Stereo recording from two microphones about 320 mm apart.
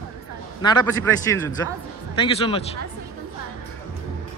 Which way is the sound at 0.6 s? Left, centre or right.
Centre.